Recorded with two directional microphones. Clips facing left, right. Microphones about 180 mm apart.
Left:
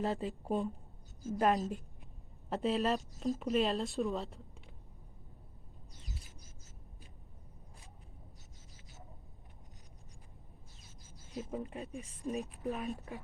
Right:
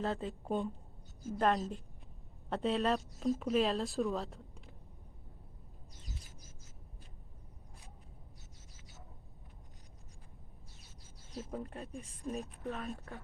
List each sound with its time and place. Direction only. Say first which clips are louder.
0.0 s speech: left 1 dB; 5° left (ahead or behind)
11.3 s speech: left 2 dB; 5° left (ahead or behind)
12.6 s speech: left 3 dB; 15° left (ahead or behind)